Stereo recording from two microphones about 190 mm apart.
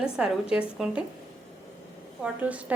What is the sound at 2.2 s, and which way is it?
Speech, 5° right (ahead or behind).